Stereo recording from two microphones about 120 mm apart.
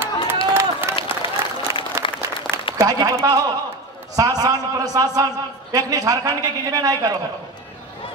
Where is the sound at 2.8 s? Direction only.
30° right (ahead or behind).